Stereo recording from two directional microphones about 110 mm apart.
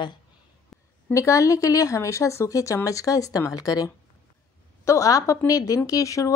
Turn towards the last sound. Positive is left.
turn(degrees=30)  # may be behind; listen again after turning